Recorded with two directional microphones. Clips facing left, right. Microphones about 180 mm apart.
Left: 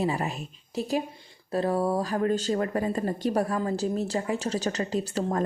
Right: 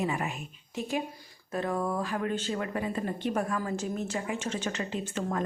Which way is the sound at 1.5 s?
35° left (ahead or behind).